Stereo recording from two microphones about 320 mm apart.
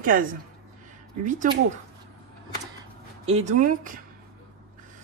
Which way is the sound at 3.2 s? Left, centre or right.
Right.